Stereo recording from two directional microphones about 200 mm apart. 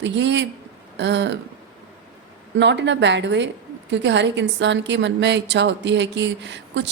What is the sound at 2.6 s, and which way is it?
A woman's voice, 60° right (ahead or behind).